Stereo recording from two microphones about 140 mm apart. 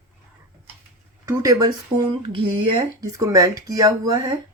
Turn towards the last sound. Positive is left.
turn(degrees=-30)  # may be behind; listen again after turning